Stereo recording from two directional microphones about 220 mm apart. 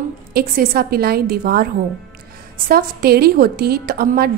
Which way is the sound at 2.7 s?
45° right (ahead or behind).